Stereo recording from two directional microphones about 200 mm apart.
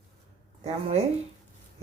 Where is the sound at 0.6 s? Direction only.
30° right (ahead or behind).